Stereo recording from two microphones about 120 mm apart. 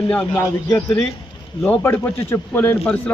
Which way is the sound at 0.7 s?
10° left (ahead or behind).